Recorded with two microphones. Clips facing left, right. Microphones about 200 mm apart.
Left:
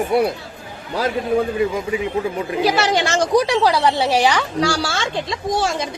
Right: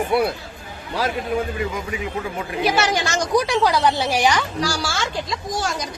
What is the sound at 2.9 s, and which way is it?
A woman's voice, 30° left (ahead or behind).